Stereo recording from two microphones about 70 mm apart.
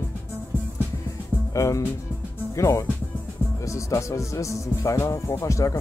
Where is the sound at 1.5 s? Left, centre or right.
Left.